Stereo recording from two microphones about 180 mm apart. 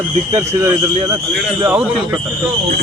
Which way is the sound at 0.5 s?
15° right (ahead or behind).